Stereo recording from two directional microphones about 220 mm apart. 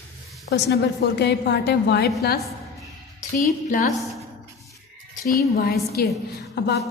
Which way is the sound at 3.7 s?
35° left (ahead or behind).